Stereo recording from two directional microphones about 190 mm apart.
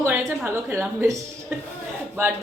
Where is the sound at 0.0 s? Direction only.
10° right (ahead or behind).